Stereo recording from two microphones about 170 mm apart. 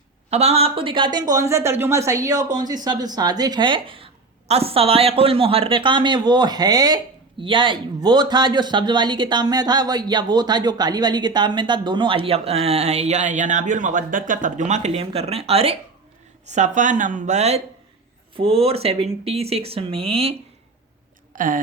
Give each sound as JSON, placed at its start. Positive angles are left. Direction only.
{"t": 0.3, "sound": "speech", "side_deg": -40}
{"t": 21.3, "sound": "speech", "side_deg": -50}